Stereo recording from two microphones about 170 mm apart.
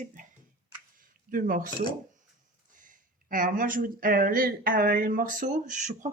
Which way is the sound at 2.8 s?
50° right (ahead or behind).